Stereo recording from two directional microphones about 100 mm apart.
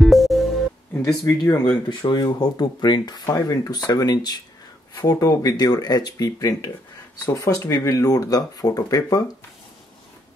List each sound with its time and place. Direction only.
0.0 s music: centre (ahead or behind)
1.4 s speech: 45° left (ahead or behind)